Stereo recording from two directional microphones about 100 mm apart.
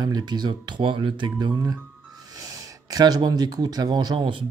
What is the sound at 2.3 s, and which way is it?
Speech, 35° right (ahead or behind).